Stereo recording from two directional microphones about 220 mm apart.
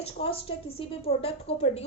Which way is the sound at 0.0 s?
25° left (ahead or behind).